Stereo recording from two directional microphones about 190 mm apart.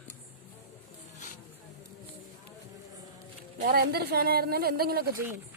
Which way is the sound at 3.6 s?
55° right (ahead or behind).